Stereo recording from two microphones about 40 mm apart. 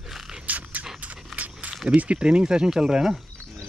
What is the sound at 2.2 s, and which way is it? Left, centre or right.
Speech, right.